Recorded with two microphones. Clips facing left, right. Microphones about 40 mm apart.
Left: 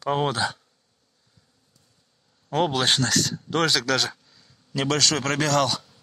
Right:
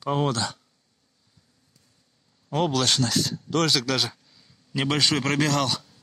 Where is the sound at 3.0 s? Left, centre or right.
Left.